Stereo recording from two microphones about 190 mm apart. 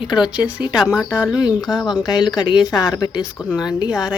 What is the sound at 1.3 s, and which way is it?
A woman's voice, 20° left (ahead or behind).